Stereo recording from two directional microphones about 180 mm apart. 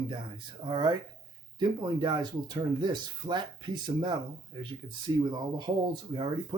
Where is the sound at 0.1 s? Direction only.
25° right (ahead or behind).